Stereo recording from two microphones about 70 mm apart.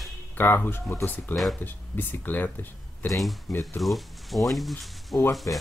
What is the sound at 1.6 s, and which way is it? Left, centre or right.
Speech, left.